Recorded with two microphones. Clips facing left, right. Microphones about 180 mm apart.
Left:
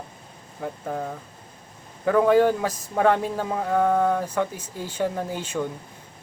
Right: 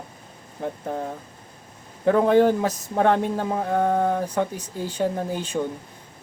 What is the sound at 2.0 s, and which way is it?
Speech, 25° right (ahead or behind).